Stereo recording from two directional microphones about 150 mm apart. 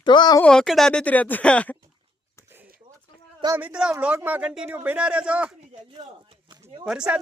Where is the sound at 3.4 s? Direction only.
10° right (ahead or behind).